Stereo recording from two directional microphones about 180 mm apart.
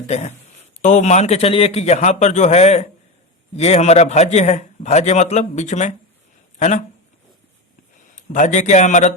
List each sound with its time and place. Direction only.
0.1 s a man's voice: 40° left (ahead or behind)
8.1 s a man's voice: 45° left (ahead or behind)